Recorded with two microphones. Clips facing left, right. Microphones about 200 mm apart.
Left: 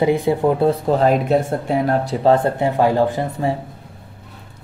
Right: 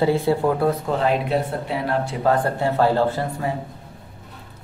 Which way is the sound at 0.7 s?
40° left (ahead or behind).